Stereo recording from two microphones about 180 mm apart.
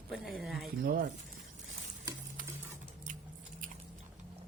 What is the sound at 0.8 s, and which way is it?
Speech, 55° right (ahead or behind).